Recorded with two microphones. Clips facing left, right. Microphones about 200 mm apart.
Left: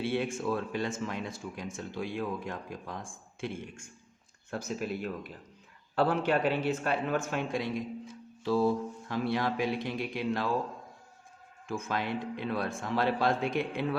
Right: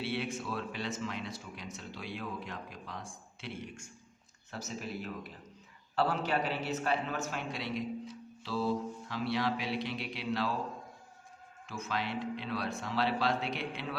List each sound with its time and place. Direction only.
0.0 s a man's voice: 50° left (ahead or behind)
11.7 s a man's voice: 50° left (ahead or behind)